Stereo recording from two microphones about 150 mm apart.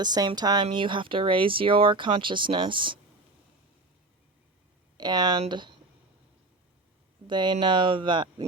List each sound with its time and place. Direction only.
0.0 s speech: 30° right (ahead or behind)
4.9 s speech: 30° right (ahead or behind)
7.3 s speech: 30° right (ahead or behind)